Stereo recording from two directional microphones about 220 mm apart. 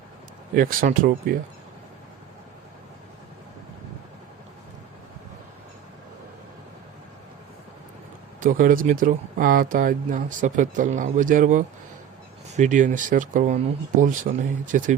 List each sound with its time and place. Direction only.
0.5 s speech: 40° right (ahead or behind)
8.4 s speech: 40° right (ahead or behind)